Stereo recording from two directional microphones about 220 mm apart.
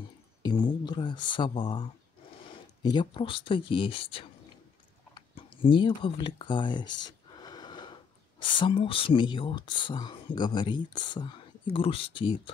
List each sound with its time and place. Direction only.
0.4 s speech: 20° left (ahead or behind)